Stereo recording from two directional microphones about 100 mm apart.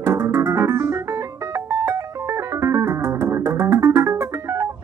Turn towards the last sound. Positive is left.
turn(degrees=-30)  # may be behind; listen again after turning